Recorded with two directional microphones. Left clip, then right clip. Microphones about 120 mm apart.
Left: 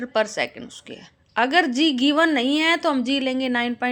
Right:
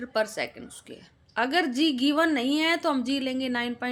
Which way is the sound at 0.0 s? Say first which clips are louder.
Left 5 dB; 20° left (ahead or behind).